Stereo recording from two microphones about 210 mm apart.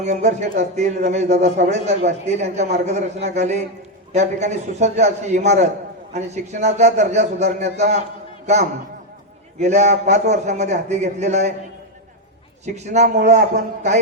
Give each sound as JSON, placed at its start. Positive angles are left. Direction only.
{"t": 0.0, "sound": "a man's voice", "side_deg": -35}
{"t": 9.6, "sound": "a man's voice", "side_deg": -35}
{"t": 12.6, "sound": "a man's voice", "side_deg": -30}
{"t": 13.1, "sound": "a man's voice", "side_deg": -50}